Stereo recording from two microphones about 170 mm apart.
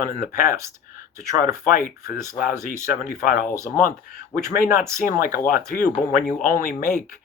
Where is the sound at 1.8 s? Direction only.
15° right (ahead or behind).